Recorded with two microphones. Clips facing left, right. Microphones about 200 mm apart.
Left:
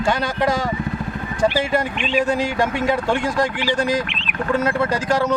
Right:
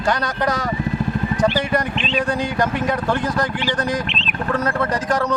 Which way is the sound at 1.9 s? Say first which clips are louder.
Left 2 dB; 10° left (ahead or behind).